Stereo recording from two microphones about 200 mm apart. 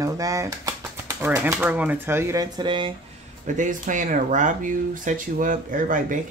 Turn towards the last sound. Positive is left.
turn(degrees=-40)  # may be behind; listen again after turning